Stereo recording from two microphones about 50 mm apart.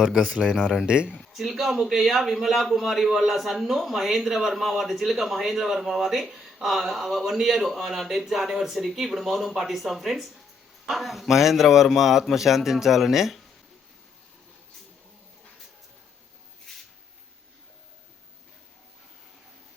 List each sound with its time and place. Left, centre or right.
0.0 s a man's voice: centre
0.9 s speech: centre
1.3 s a man's voice: centre